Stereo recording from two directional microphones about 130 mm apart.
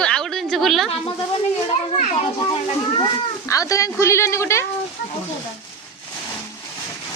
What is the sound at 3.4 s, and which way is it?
A woman's voice, 25° left (ahead or behind).